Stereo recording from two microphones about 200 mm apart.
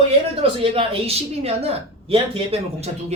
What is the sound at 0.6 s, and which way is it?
Speech, 30° right (ahead or behind).